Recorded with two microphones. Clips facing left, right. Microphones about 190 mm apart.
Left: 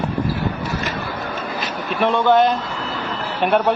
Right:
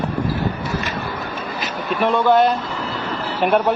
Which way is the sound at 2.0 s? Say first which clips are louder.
Even; centre (ahead or behind).